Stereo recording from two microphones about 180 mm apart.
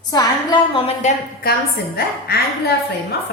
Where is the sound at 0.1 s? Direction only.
20° left (ahead or behind).